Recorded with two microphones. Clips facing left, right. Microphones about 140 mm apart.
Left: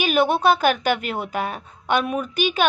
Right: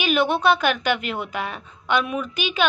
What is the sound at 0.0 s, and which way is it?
A woman's voice, 40° left (ahead or behind).